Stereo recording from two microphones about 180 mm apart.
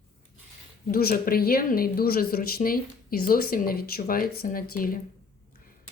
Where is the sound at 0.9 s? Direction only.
55° left (ahead or behind).